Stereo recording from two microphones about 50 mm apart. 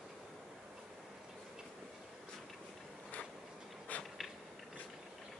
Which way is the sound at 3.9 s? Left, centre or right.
Left.